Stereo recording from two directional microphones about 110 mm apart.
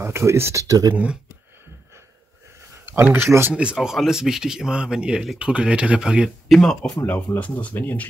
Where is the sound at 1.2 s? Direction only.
20° right (ahead or behind).